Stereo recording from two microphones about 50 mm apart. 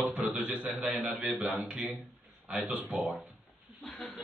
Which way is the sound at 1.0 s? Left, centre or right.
Right.